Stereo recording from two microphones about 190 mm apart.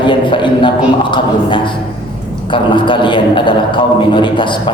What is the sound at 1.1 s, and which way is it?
A man's voice, 25° left (ahead or behind).